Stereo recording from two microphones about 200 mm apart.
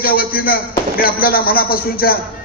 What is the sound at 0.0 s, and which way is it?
Speech, 50° left (ahead or behind).